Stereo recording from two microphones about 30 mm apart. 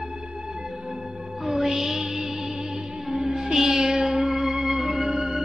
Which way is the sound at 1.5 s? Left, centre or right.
Centre.